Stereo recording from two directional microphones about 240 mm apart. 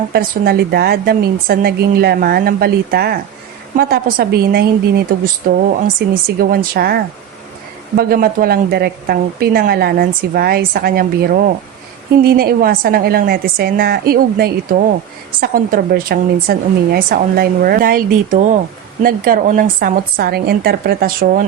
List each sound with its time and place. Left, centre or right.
0.1 s a woman's voice: right